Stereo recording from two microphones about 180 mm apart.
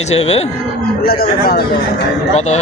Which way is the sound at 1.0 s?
55° left (ahead or behind).